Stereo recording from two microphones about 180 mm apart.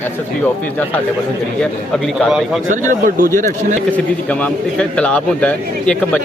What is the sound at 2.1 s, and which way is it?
Speech, centre (ahead or behind).